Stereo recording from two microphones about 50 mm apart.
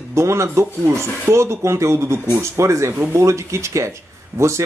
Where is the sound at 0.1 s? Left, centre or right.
Right.